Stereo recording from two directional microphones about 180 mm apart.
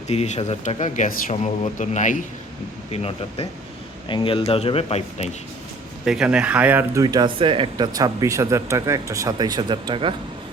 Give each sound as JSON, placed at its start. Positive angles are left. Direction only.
{"t": 0.1, "sound": "speech", "side_deg": 35}
{"t": 2.9, "sound": "speech", "side_deg": 35}
{"t": 6.1, "sound": "speech", "side_deg": -5}